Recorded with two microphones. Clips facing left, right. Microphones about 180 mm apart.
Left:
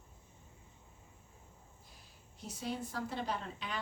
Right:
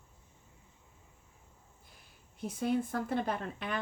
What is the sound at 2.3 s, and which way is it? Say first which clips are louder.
A woman's voice: right 9 dB; 55° right (ahead or behind).